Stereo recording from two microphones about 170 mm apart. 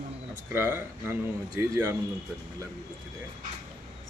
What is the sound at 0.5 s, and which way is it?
Speech, 15° right (ahead or behind).